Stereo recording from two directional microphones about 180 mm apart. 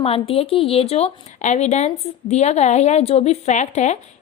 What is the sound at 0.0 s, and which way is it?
A woman's voice, 30° left (ahead or behind).